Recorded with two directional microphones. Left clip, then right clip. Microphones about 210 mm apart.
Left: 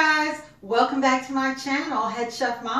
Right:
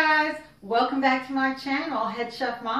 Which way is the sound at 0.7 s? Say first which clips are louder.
Left 2 dB; centre (ahead or behind).